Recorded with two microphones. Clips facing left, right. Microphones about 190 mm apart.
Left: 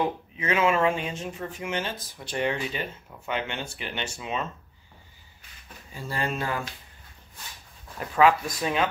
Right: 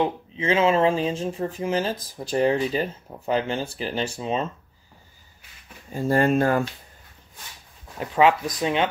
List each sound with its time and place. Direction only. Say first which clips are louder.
0.0 s speech: right 4 dB; 25° right (ahead or behind)
5.9 s speech: right 11 dB; 45° right (ahead or behind)
8.0 s speech: right 2 dB; 25° right (ahead or behind)